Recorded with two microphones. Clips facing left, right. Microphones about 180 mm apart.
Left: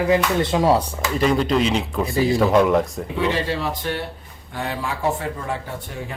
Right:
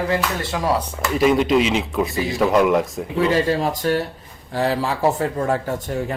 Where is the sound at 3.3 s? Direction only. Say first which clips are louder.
Right 5 dB; 45° right (ahead or behind).